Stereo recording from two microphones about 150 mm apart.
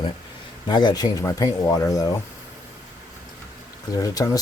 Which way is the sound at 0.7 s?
30° left (ahead or behind).